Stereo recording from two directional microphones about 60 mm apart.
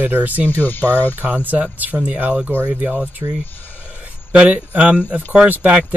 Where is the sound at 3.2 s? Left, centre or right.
Right.